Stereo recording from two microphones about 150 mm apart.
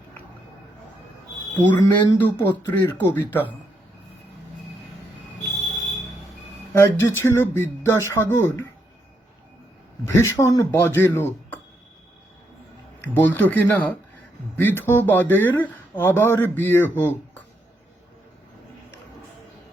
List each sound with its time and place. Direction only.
1.5 s speech: 10° left (ahead or behind)
6.7 s speech: 15° left (ahead or behind)
10.3 s speech: 20° left (ahead or behind)
13.0 s speech: 10° left (ahead or behind)